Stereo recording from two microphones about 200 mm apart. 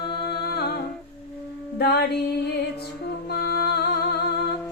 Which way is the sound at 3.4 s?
50° left (ahead or behind).